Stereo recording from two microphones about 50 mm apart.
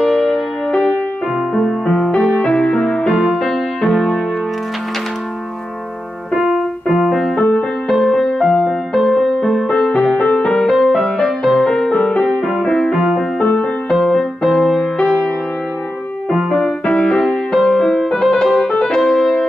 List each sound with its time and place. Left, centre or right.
0.0 s music: centre
2.4 s music: centre
3.1 s music: centre
3.3 s music: centre
3.9 s keyboard: centre
6.4 s keyboard: centre
7.3 s music: left
7.9 s music: centre
10.7 s music: centre; by 13.7 s left
13.8 s music: centre
16.3 s music: centre
16.9 s music: centre